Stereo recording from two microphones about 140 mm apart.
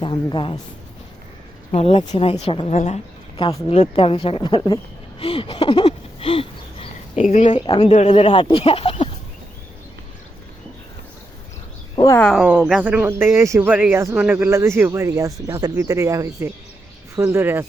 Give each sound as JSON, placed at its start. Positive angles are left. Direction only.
{"t": 0.0, "sound": "speech", "side_deg": 35}
{"t": 1.7, "sound": "speech", "side_deg": 45}
{"t": 3.3, "sound": "speech", "side_deg": 35}
{"t": 5.2, "sound": "a sound", "side_deg": 40}
{"t": 7.2, "sound": "speech", "side_deg": 60}
{"t": 7.5, "sound": "speech", "side_deg": 35}
{"t": 7.9, "sound": "speech", "side_deg": 50}
{"t": 11.9, "sound": "a sound", "side_deg": 25}
{"t": 12.2, "sound": "speech", "side_deg": 0}